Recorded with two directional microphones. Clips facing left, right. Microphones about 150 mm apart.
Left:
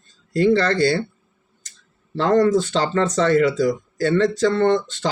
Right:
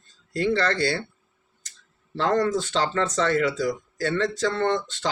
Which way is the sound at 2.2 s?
35° left (ahead or behind).